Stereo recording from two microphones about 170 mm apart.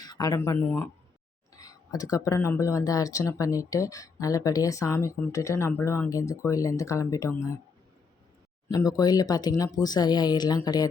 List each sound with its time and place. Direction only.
0.0 s speech: 25° left (ahead or behind)
8.7 s speech: 20° left (ahead or behind)